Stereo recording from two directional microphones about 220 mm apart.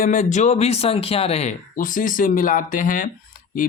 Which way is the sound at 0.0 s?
35° left (ahead or behind).